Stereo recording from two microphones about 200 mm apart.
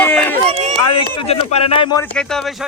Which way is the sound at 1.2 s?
30° left (ahead or behind).